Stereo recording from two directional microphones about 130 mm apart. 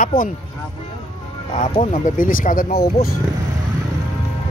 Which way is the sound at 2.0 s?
90° left.